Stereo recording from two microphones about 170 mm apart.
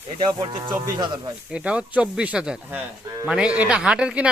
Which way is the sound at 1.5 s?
5° right (ahead or behind).